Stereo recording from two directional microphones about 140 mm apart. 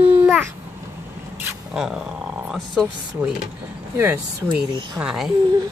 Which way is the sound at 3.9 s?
15° right (ahead or behind).